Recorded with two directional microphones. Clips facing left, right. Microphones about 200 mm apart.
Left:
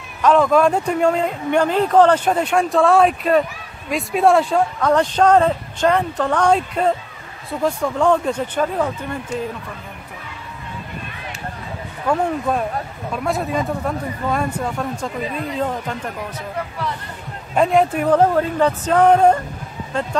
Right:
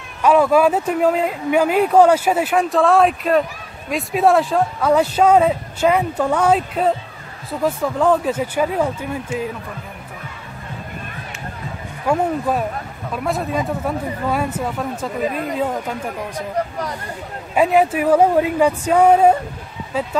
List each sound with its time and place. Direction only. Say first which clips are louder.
0.2 s speech: right 1 dB; 10° right (ahead or behind)
12.1 s speech: right 1 dB; 5° right (ahead or behind)
15.2 s speech: right 4 dB; 45° right (ahead or behind)
15.5 s speech: right 1 dB; 5° right (ahead or behind)
16.5 s speech: right 3 dB; 40° right (ahead or behind)
17.6 s speech: right 1 dB; 5° right (ahead or behind)